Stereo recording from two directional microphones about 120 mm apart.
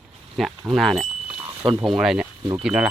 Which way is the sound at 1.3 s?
50° right (ahead or behind).